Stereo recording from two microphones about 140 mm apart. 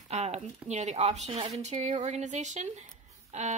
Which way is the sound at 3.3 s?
60° right (ahead or behind).